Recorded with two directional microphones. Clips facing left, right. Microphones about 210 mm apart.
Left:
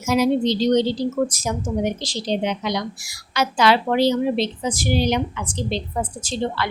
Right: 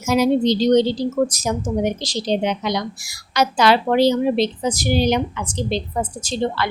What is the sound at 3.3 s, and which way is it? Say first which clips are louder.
A woman's voice: right 2 dB; 40° right (ahead or behind).